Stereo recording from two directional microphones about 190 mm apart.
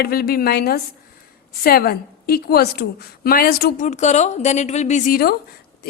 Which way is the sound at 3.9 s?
40° left (ahead or behind).